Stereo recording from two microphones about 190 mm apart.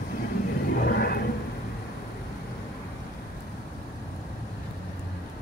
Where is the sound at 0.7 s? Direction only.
55° left (ahead or behind).